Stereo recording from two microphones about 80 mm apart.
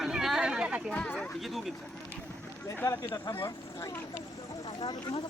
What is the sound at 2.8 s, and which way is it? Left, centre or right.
Speech, left.